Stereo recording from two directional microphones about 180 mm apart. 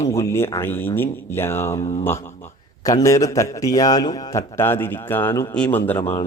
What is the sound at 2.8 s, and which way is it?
A man's voice, 20° left (ahead or behind).